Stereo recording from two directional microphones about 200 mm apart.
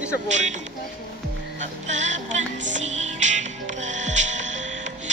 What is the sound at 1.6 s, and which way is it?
Music, 35° right (ahead or behind).